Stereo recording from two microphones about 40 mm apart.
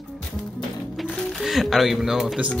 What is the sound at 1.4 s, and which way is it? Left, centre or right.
Speech, centre.